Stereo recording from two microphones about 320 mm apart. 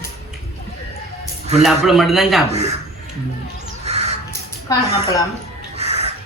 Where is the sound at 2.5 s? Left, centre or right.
Centre.